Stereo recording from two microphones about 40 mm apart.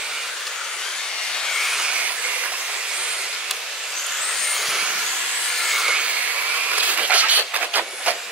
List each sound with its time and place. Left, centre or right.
6.7 s train: right